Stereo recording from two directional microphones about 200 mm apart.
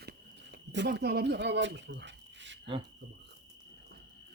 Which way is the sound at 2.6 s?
25° right (ahead or behind).